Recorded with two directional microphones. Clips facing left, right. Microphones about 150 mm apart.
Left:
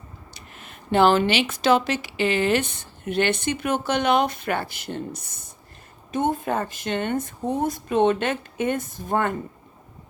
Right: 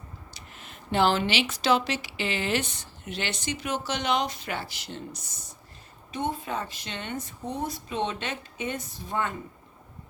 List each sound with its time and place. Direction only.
0.3 s speech: 55° left (ahead or behind)